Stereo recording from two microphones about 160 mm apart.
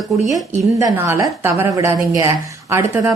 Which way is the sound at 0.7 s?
20° right (ahead or behind).